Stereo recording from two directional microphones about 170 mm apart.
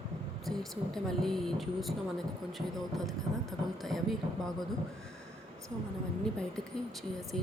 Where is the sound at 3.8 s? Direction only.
Centre (ahead or behind).